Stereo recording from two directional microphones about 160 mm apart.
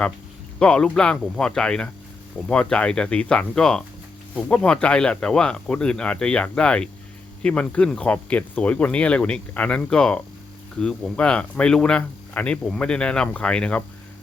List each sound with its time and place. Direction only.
0.6 s speech: 5° left (ahead or behind)